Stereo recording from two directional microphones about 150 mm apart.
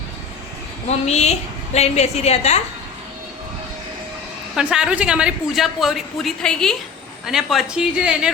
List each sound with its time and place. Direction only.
0.9 s a woman's voice: 45° left (ahead or behind)
4.5 s a woman's voice: 5° right (ahead or behind)